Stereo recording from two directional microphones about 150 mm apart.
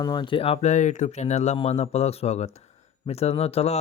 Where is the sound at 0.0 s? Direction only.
30° left (ahead or behind).